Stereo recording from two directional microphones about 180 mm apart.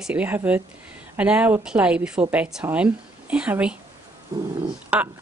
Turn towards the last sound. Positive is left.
turn(degrees=-5)  # may be behind; listen again after turning